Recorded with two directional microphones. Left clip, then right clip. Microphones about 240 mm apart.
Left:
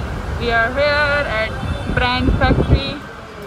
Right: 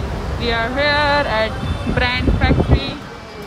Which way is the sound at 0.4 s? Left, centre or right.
Centre.